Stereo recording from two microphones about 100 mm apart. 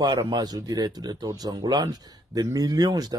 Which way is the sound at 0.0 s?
50° right (ahead or behind).